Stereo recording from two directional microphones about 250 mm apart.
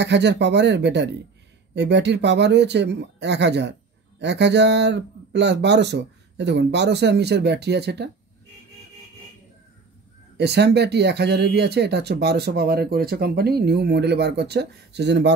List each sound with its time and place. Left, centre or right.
0.0 s speech: right
10.3 s speech: right